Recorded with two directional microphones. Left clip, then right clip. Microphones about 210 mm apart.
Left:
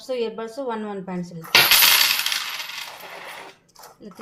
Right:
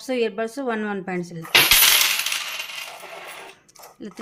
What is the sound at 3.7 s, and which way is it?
Dog, 40° right (ahead or behind).